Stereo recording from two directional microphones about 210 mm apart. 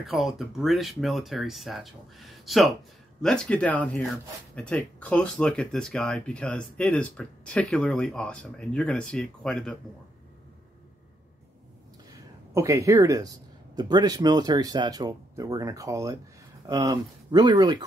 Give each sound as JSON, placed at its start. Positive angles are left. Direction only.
{"t": 0.0, "sound": "speech", "side_deg": 0}
{"t": 12.1, "sound": "a sound", "side_deg": -15}
{"t": 13.7, "sound": "speech", "side_deg": -20}